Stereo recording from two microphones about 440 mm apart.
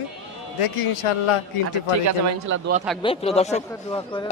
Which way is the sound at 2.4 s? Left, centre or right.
Right.